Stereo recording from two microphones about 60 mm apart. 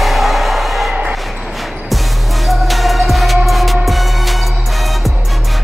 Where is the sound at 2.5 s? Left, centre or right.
Centre.